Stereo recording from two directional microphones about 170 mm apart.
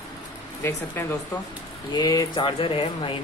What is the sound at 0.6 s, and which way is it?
Speech, 15° left (ahead or behind).